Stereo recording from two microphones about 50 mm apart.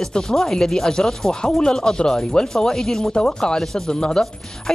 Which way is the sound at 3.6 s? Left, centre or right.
Centre.